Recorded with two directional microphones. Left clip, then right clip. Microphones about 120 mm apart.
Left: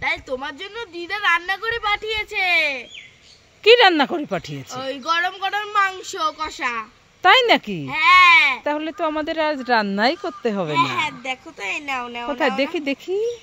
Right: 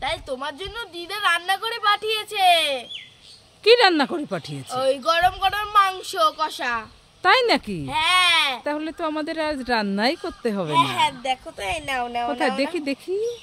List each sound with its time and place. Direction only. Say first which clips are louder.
0.0 s a woman's voice: left 3 dB; 50° right (ahead or behind)
3.6 s speech: left 3 dB; 5° left (ahead or behind)
4.7 s a woman's voice: right 2 dB; 55° right (ahead or behind)
7.2 s speech: left 4 dB; 5° left (ahead or behind)
7.8 s a woman's voice: left 7 dB; 45° right (ahead or behind)
8.6 s speech: left 3 dB; centre (ahead or behind)
11.0 s speech: right 2 dB; 50° right (ahead or behind)
12.3 s speech: left 6 dB; 10° left (ahead or behind)